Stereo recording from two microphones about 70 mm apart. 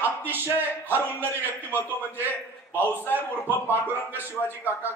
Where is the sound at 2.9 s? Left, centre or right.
Left.